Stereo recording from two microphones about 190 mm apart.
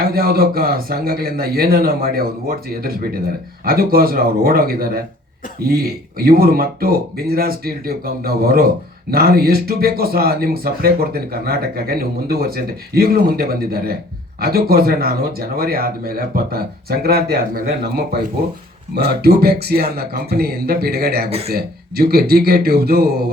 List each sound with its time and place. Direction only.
0.0 s speech: 50° right (ahead or behind)
21.2 s speech: 35° right (ahead or behind)
21.5 s speech: 55° right (ahead or behind)